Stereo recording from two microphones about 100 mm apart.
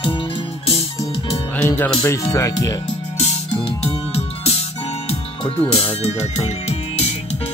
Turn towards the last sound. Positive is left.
turn(degrees=90)